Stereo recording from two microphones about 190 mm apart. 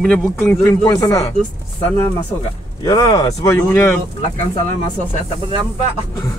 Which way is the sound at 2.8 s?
25° left (ahead or behind).